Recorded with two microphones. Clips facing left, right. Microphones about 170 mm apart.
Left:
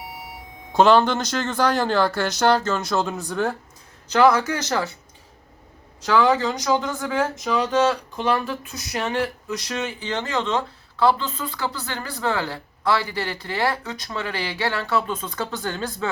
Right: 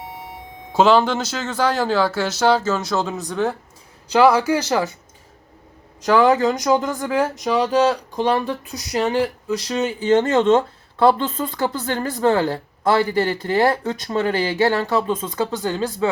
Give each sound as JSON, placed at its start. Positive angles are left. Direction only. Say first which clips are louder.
{"t": 0.0, "sound": "a sound", "louder": "right 3 dB", "side_deg": -25}
{"t": 0.7, "sound": "a man's voice", "louder": "right 1 dB", "side_deg": -5}
{"t": 6.1, "sound": "speech", "louder": "right 4 dB", "side_deg": -40}
{"t": 7.5, "sound": "speech", "louder": "right 3 dB", "side_deg": -30}